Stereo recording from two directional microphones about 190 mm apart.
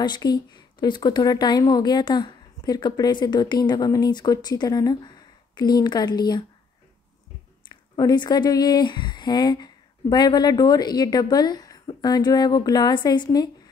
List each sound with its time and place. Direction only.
0.0 s a woman's voice: 20° left (ahead or behind)
7.6 s a woman's voice: 25° left (ahead or behind)